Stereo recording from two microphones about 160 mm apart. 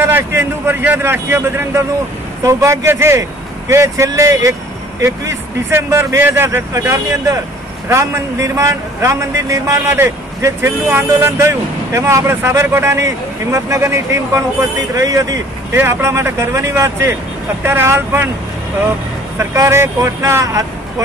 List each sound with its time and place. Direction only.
0.0 s a man's voice: 15° right (ahead or behind)
19.3 s a man's voice: 20° right (ahead or behind)